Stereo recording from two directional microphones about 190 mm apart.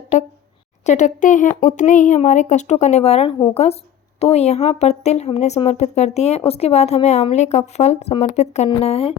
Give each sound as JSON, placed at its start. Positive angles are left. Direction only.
{"t": 0.9, "sound": "speech", "side_deg": 40}